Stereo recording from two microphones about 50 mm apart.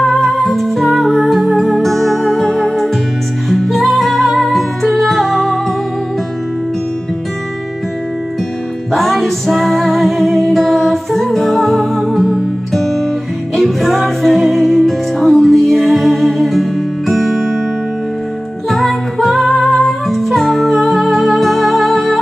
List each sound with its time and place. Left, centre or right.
0.0 s music: centre
8.9 s music: centre
18.7 s music: centre